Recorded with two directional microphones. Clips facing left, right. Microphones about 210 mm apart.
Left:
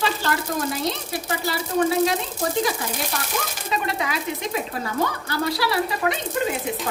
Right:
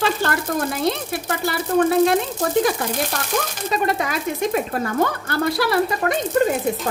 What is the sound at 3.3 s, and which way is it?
Speech, 45° right (ahead or behind).